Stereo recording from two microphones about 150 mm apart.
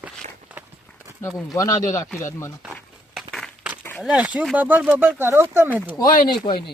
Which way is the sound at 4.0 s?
10° right (ahead or behind).